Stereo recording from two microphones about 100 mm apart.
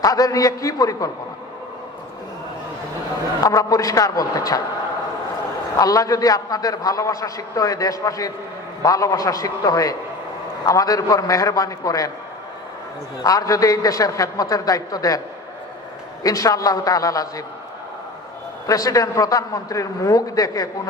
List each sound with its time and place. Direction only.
0.0 s a man's voice: 35° left (ahead or behind)
3.4 s a man's voice: 35° left (ahead or behind)
5.7 s a man's voice: 35° left (ahead or behind)
13.2 s a man's voice: 35° left (ahead or behind)
16.2 s a man's voice: 35° left (ahead or behind)
18.7 s a man's voice: 35° left (ahead or behind)